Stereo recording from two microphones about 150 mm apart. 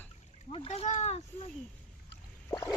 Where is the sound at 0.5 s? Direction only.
40° left (ahead or behind).